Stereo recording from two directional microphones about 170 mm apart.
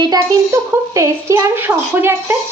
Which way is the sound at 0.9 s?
20° right (ahead or behind).